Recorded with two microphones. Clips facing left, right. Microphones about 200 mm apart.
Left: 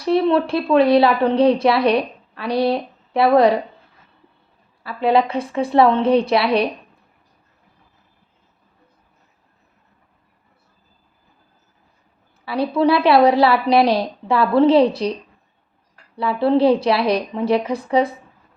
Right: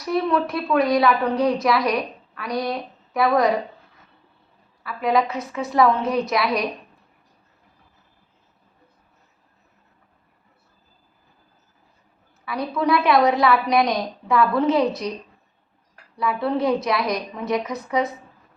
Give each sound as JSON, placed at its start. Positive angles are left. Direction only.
{"t": 0.0, "sound": "a woman's voice", "side_deg": 30}
{"t": 4.8, "sound": "a woman's voice", "side_deg": 30}
{"t": 12.5, "sound": "a woman's voice", "side_deg": 30}
{"t": 16.1, "sound": "a woman's voice", "side_deg": 30}